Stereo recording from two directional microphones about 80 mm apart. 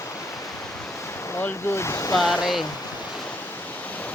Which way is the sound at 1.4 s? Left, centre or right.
Left.